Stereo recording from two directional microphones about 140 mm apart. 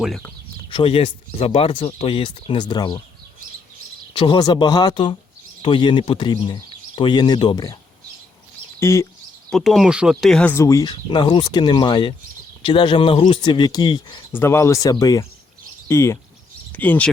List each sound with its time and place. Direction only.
0.7 s speech: 40° left (ahead or behind)
4.1 s speech: 35° left (ahead or behind)
8.8 s speech: 20° left (ahead or behind)
9.5 s speech: centre (ahead or behind)
10.5 s speech: 20° left (ahead or behind)
10.9 s speech: 35° left (ahead or behind)
14.3 s speech: 15° left (ahead or behind)